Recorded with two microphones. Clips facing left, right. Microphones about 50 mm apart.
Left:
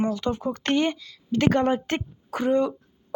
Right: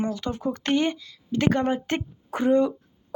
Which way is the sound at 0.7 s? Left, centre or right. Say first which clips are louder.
Left 1 dB; centre.